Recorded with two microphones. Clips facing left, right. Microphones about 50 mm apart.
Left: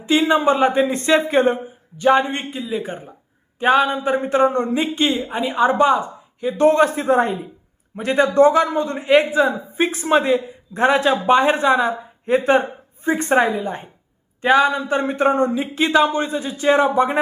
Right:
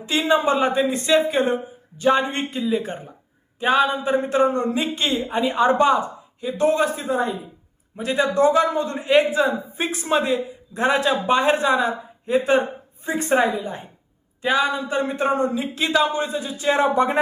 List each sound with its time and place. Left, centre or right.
0.0 s speech: left
2.5 s a woman's voice: centre
3.6 s speech: left
5.1 s a woman's voice: centre
6.4 s speech: left